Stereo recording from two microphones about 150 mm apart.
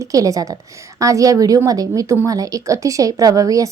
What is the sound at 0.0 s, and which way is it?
A woman's voice, 20° right (ahead or behind).